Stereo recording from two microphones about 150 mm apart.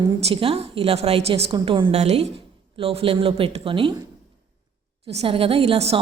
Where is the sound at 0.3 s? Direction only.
40° right (ahead or behind).